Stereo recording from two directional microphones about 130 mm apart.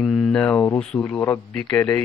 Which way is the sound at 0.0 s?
Centre (ahead or behind).